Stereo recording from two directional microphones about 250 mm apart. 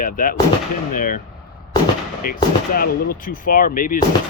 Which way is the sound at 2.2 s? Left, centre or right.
Left.